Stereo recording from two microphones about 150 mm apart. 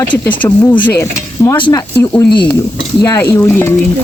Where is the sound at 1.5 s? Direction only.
30° left (ahead or behind).